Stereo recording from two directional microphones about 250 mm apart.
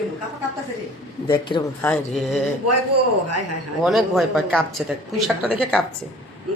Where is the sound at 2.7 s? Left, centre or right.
Right.